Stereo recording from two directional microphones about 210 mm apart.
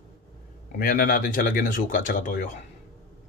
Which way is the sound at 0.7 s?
45° left (ahead or behind).